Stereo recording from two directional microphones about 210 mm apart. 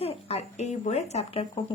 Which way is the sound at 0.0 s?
30° left (ahead or behind).